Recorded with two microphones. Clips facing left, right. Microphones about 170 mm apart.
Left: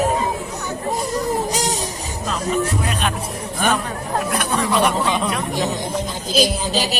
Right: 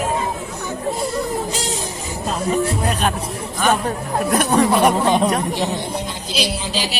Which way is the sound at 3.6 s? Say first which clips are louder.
Right 3 dB; 40° right (ahead or behind).